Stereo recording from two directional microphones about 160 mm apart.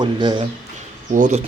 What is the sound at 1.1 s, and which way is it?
Speech, 55° right (ahead or behind).